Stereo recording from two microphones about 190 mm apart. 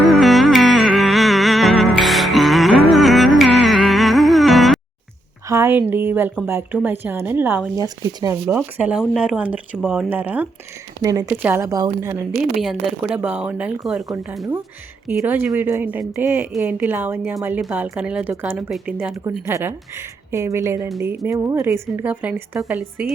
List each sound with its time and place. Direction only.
0.0 s music: centre (ahead or behind)
5.5 s a sound: 15° right (ahead or behind)
5.9 s speech: 10° right (ahead or behind)
12.4 s speech: centre (ahead or behind)
15.0 s speech: 10° right (ahead or behind)